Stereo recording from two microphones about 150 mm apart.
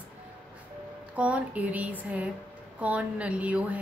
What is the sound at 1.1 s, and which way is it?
A woman's voice, 10° right (ahead or behind).